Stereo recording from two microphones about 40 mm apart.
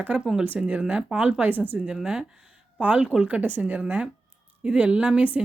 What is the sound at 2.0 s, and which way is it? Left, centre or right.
Speech, centre.